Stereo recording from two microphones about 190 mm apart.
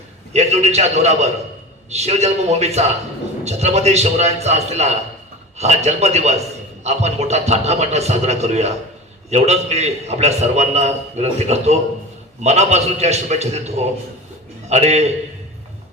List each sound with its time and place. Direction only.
0.3 s a man's voice: 35° right (ahead or behind)